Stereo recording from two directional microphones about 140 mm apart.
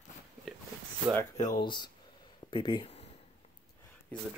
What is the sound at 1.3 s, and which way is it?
Speech, 25° left (ahead or behind).